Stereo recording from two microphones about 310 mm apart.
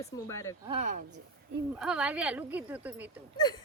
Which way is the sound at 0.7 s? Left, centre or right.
Right.